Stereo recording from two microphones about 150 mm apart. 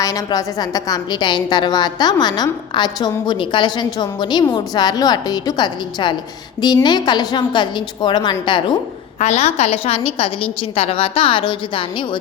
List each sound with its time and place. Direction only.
0.0 s a woman's voice: 25° left (ahead or behind)
9.1 s a woman's voice: 45° left (ahead or behind)